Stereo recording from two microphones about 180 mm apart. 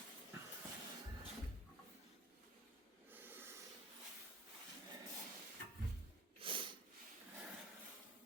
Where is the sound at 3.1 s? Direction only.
10° right (ahead or behind).